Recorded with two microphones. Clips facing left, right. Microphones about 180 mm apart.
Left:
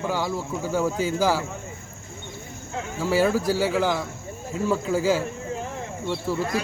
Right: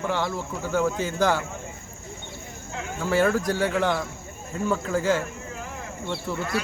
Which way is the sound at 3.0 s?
5° left (ahead or behind).